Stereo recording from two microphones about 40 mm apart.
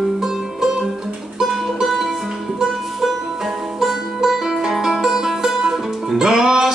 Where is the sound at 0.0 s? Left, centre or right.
Centre.